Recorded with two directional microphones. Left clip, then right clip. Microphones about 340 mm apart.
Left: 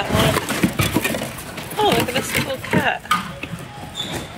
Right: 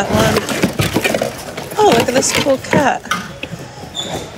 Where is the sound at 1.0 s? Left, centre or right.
Centre.